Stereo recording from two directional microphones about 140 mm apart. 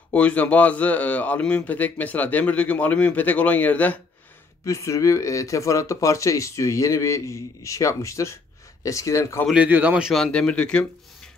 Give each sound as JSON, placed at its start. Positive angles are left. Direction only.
{"t": 0.1, "sound": "a man's voice", "side_deg": 10}
{"t": 4.6, "sound": "speech", "side_deg": 20}
{"t": 9.5, "sound": "speech", "side_deg": -10}